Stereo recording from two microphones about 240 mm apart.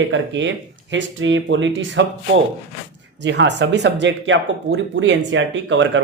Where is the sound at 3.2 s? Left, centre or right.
Right.